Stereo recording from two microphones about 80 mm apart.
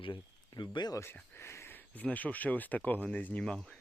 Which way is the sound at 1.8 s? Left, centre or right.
Left.